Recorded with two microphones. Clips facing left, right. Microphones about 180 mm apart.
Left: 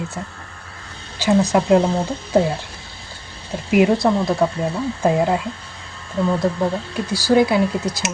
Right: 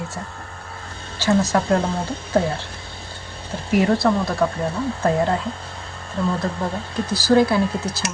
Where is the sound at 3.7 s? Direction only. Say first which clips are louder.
Left 2 dB; 10° left (ahead or behind).